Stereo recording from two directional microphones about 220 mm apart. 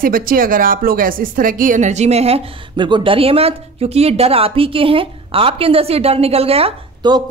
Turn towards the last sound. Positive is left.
turn(degrees=-20)  # may be behind; listen again after turning